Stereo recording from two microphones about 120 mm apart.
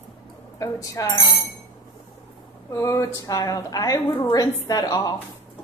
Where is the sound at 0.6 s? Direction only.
30° left (ahead or behind).